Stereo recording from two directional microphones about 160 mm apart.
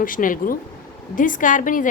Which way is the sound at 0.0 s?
60° left (ahead or behind).